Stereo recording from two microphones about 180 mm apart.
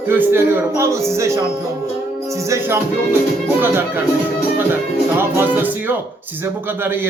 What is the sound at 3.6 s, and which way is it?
Music, 10° right (ahead or behind).